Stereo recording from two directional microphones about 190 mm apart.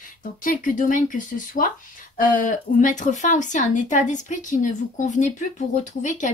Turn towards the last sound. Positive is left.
turn(degrees=40)  # may be behind; listen again after turning